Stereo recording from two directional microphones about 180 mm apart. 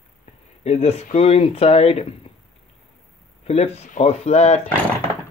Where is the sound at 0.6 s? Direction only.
35° left (ahead or behind).